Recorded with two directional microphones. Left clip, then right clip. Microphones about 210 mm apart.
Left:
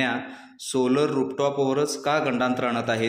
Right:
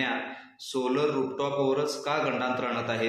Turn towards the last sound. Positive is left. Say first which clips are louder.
# left 4 dB
turn(degrees=45)  # may be behind; listen again after turning